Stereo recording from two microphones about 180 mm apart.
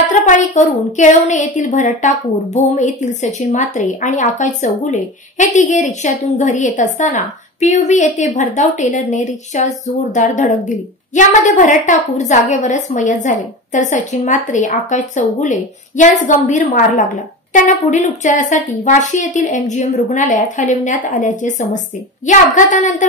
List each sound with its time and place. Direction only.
0.3 s a woman's voice: 45° left (ahead or behind)